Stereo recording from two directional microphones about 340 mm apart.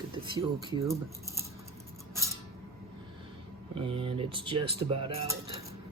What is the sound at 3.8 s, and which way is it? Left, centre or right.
Speech, centre.